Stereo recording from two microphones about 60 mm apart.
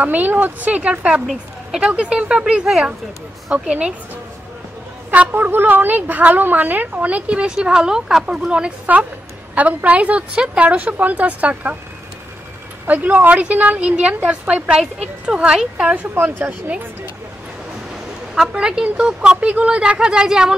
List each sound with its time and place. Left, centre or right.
0.0 s a woman's voice: right
1.2 s a woman's voice: centre
1.9 s a woman's voice: centre
5.1 s a woman's voice: right; by 8.5 s centre
8.5 s a woman's voice: centre
12.8 s a woman's voice: right
14.7 s a woman's voice: centre
15.8 s a woman's voice: right
18.3 s a woman's voice: centre